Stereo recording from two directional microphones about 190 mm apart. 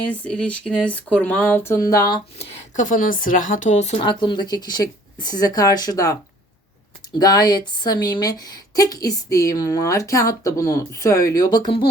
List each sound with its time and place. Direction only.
0.1 s speech: 5° left (ahead or behind); by 2.5 s 25° left (ahead or behind)
2.7 s speech: 45° left (ahead or behind); by 6.1 s 20° left (ahead or behind)
7.2 s speech: 20° left (ahead or behind)